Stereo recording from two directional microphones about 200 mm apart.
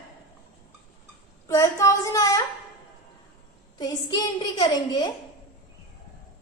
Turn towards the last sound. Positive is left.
turn(degrees=20)  # may be behind; listen again after turning